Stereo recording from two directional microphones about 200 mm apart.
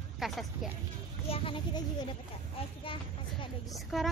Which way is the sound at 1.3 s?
25° left (ahead or behind).